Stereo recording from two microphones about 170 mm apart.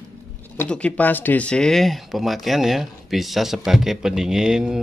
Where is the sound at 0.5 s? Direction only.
5° left (ahead or behind).